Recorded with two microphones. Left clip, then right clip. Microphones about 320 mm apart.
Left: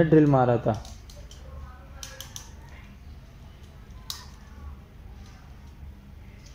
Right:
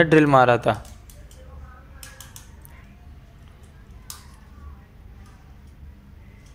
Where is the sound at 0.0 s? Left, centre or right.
Right.